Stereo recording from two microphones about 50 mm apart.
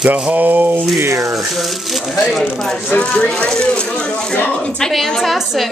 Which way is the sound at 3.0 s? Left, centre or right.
Left.